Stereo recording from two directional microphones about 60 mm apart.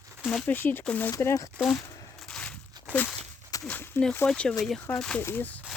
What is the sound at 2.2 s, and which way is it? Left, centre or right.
Walk, centre.